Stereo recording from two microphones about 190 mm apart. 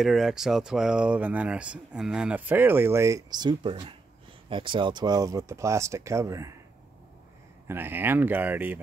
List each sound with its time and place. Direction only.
0.0 s speech: centre (ahead or behind)
7.6 s speech: 10° right (ahead or behind)